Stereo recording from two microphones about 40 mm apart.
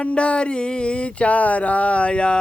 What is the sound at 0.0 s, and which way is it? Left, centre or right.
Speech, left.